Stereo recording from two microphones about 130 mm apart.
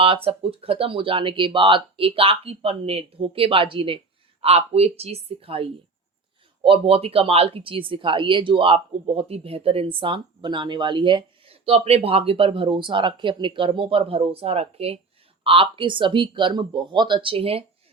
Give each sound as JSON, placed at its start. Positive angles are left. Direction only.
{"t": 0.0, "sound": "speech", "side_deg": -45}